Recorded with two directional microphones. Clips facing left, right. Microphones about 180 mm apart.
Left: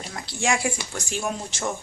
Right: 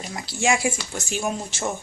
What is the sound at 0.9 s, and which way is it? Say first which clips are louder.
Speech: right 2 dB; 25° right (ahead or behind).